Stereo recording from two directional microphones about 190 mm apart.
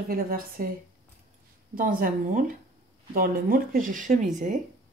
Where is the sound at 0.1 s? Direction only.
50° right (ahead or behind).